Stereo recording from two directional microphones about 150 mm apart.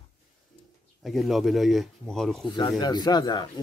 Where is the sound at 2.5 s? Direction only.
30° left (ahead or behind).